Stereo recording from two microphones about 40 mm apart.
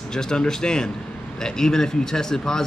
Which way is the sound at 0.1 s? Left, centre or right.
Centre.